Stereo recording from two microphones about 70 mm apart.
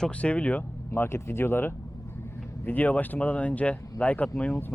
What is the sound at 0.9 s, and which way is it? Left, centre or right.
Speech, left.